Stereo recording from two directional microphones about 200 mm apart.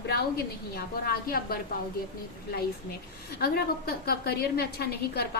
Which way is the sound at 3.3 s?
50° left (ahead or behind).